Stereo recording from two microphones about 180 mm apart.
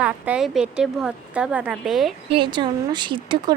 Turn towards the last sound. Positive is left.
turn(degrees=-25)  # may be behind; listen again after turning